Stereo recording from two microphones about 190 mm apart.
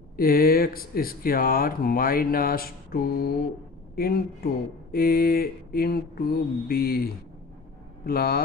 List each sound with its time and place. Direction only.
0.1 s speech: 50° left (ahead or behind)